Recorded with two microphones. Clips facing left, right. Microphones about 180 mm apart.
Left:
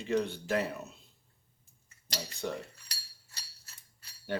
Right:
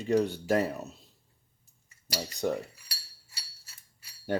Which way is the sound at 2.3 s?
40° right (ahead or behind).